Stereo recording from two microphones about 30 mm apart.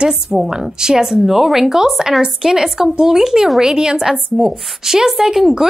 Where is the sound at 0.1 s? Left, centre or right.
Centre.